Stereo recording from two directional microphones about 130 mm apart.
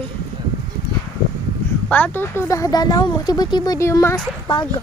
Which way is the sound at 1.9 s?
15° left (ahead or behind).